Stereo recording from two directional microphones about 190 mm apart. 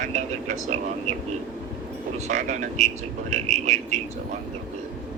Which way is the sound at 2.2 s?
40° right (ahead or behind).